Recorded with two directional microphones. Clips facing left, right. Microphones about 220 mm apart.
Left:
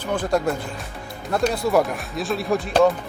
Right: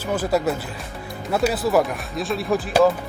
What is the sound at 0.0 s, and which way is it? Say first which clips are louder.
Speech: right 1 dB; 5° right (ahead or behind).